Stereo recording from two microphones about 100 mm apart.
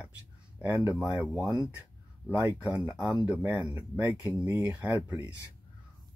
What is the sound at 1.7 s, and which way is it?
Speech, 20° right (ahead or behind).